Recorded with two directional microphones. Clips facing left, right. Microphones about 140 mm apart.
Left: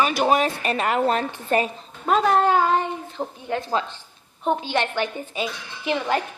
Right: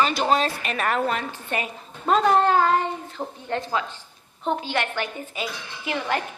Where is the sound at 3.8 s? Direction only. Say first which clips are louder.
Left 2 dB; 30° left (ahead or behind).